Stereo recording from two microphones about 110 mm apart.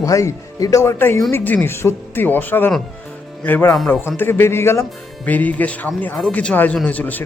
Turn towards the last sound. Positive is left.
turn(degrees=15)  # may be behind; listen again after turning